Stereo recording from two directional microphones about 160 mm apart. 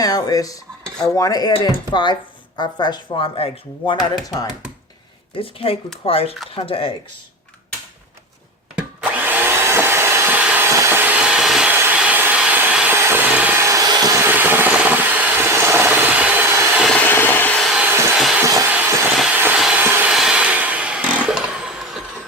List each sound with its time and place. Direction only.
0.0 s dishes: 25° left (ahead or behind)
1.0 s speech: 20° left (ahead or behind)
5.4 s speech: 35° left (ahead or behind)
8.7 s vacuum cleaner: 10° right (ahead or behind)
11.7 s vehicle: 10° right (ahead or behind)
16.8 s a sound: 10° left (ahead or behind)
17.8 s a sound: 10° right (ahead or behind)
18.2 s vehicle: centre (ahead or behind)